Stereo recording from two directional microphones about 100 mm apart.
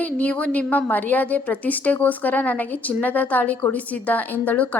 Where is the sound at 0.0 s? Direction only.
15° left (ahead or behind).